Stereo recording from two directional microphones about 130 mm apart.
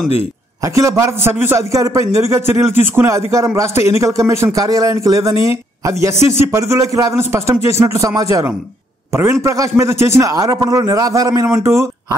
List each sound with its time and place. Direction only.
0.7 s a man's voice: 25° right (ahead or behind)